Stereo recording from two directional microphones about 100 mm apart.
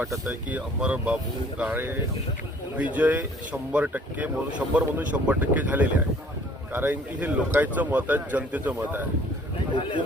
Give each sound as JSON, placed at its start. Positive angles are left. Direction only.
{"t": 0.0, "sound": "speech", "side_deg": -25}
{"t": 0.8, "sound": "speech", "side_deg": -10}